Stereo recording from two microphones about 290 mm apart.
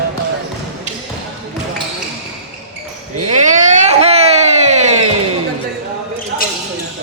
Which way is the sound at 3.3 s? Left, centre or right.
Right.